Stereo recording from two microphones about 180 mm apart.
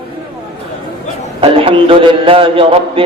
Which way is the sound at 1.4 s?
30° right (ahead or behind).